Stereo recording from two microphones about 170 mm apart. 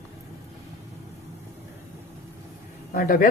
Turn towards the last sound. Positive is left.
turn(degrees=55)  # may be behind; listen again after turning